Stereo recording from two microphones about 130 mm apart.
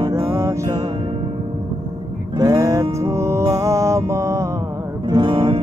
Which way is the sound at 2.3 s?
25° right (ahead or behind).